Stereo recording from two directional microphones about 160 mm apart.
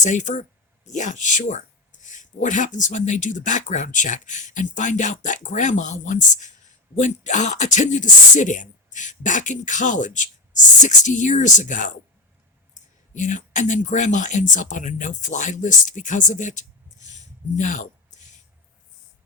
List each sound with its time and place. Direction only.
0.0 s speech: 50° left (ahead or behind)
13.1 s speech: 50° left (ahead or behind)